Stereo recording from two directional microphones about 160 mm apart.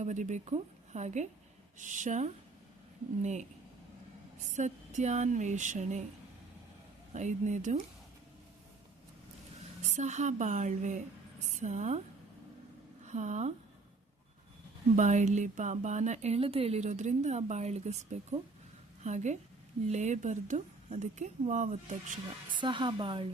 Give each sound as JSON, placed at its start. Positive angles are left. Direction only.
{"t": 0.0, "sound": "speech", "side_deg": -50}
{"t": 4.5, "sound": "speech", "side_deg": -50}
{"t": 7.1, "sound": "speech", "side_deg": -50}
{"t": 9.9, "sound": "speech", "side_deg": -45}
{"t": 13.1, "sound": "speech", "side_deg": -50}
{"t": 14.9, "sound": "speech", "side_deg": -50}
{"t": 22.5, "sound": "a woman's voice", "side_deg": -30}